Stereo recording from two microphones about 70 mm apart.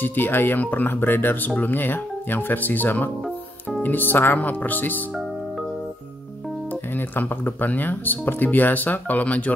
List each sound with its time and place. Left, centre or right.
0.0 s speech: left
7.0 s speech: left